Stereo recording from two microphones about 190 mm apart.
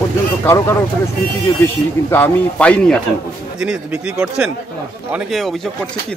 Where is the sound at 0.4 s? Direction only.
15° left (ahead or behind).